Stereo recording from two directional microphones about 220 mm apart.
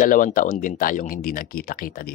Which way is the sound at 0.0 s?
40° left (ahead or behind).